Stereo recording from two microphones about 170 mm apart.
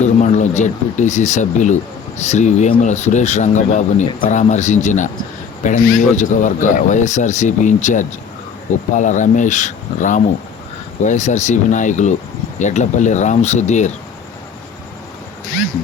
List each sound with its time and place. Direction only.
0.0 s speech: 45° left (ahead or behind)